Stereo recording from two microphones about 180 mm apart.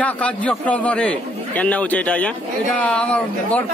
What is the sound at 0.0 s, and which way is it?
A man's voice, 5° left (ahead or behind).